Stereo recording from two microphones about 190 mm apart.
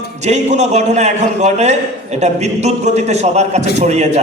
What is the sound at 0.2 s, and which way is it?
A man's voice, 35° right (ahead or behind).